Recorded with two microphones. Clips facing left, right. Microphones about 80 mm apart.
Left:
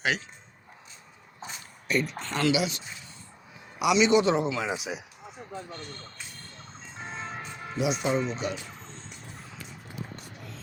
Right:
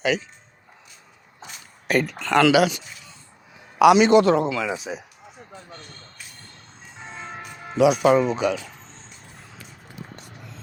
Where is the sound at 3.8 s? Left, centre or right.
Right.